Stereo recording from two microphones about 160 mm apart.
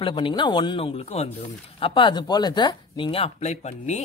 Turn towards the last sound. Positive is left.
turn(degrees=45)  # may be behind; listen again after turning